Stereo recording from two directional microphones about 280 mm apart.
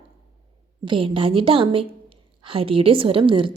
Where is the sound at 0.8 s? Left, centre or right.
Centre.